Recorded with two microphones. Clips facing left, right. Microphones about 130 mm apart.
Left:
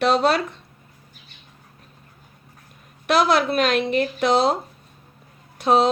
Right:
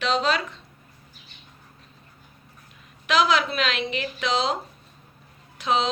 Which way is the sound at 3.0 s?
45° left (ahead or behind).